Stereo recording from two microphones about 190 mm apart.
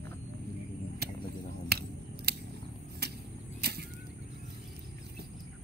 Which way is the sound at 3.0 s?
60° right (ahead or behind).